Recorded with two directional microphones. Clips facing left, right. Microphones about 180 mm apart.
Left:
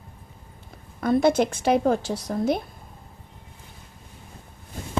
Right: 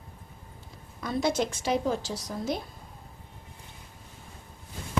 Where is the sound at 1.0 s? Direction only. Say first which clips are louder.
Left 8 dB; 55° left (ahead or behind).